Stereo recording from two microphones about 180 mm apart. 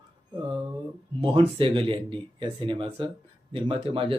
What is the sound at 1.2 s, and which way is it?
Speech, 30° right (ahead or behind).